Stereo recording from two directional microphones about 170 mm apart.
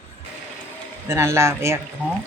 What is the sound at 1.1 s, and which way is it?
Speech, 15° right (ahead or behind).